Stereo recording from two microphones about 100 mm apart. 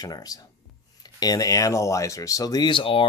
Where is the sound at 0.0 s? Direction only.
40° left (ahead or behind).